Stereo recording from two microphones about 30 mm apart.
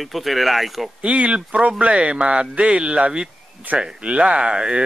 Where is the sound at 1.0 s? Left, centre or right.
Right.